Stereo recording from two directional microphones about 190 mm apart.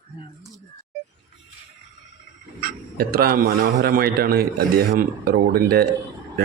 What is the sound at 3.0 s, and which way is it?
A man's voice, 50° right (ahead or behind).